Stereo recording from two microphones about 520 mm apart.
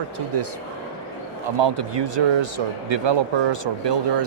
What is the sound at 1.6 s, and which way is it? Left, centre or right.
Speech, right.